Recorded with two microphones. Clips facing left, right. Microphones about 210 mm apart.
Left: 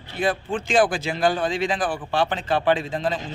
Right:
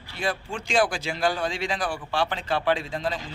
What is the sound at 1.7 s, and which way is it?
Speech, 50° left (ahead or behind).